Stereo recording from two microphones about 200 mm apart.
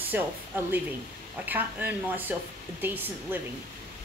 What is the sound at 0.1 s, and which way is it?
Speech, 10° right (ahead or behind).